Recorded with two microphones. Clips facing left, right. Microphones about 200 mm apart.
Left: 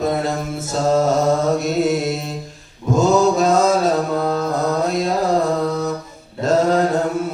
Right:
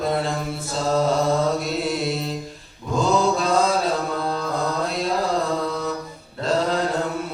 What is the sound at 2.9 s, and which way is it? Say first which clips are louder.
Mantra: left 5 dB; 45° left (ahead or behind).